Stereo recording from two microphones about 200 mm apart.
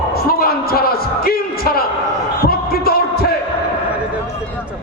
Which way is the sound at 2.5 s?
50° left (ahead or behind).